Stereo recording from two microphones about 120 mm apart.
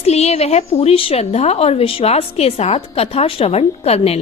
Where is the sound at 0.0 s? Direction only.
60° left (ahead or behind).